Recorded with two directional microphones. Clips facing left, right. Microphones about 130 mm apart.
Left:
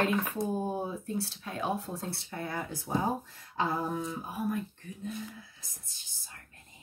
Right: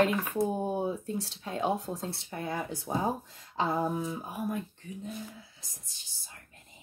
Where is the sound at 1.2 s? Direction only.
25° right (ahead or behind).